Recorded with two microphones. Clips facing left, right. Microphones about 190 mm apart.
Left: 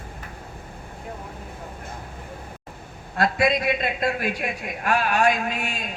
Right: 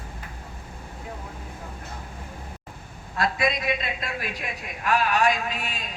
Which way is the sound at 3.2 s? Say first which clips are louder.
Left 4 dB; 55° left (ahead or behind).